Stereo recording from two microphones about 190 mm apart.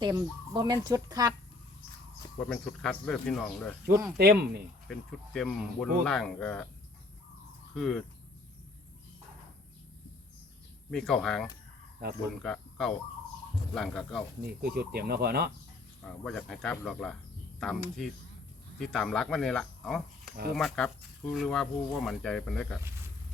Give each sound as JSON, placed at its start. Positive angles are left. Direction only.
{"t": 0.1, "sound": "speech", "side_deg": -20}
{"t": 2.4, "sound": "speech", "side_deg": 5}
{"t": 4.2, "sound": "speech", "side_deg": -55}
{"t": 4.9, "sound": "speech", "side_deg": 0}
{"t": 7.8, "sound": "speech", "side_deg": 5}
{"t": 10.9, "sound": "speech", "side_deg": 5}
{"t": 14.4, "sound": "speech", "side_deg": -55}
{"t": 16.0, "sound": "speech", "side_deg": 5}